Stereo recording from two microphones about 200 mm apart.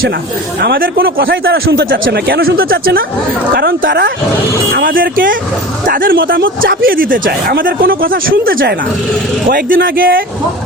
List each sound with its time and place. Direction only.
0.6 s speech: 50° right (ahead or behind)
1.2 s a man's voice: 65° right (ahead or behind)
2.0 s speech: 50° right (ahead or behind)